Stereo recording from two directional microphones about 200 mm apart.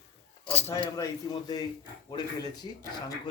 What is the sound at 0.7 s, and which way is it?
Speech, 15° left (ahead or behind).